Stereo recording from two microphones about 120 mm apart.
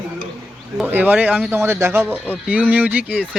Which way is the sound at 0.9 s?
15° right (ahead or behind).